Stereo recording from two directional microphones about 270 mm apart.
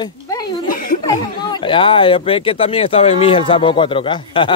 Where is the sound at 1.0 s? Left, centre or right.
Centre.